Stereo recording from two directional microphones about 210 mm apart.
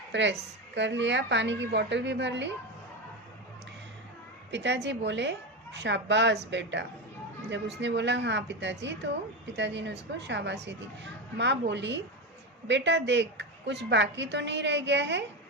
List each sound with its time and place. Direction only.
0.1 s a woman's voice: 55° right (ahead or behind)
4.5 s a woman's voice: 55° right (ahead or behind)